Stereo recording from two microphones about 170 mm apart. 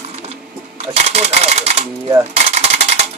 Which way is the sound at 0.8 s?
40° right (ahead or behind).